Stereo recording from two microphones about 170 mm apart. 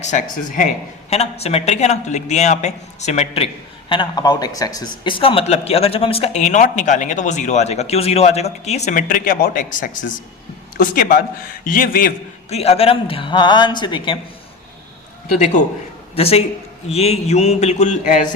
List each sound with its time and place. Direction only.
0.0 s speech: 45° left (ahead or behind)
1.1 s a man's voice: 40° left (ahead or behind); by 12.1 s 55° left (ahead or behind)
12.5 s a man's voice: 35° left (ahead or behind)
16.1 s a man's voice: 35° left (ahead or behind)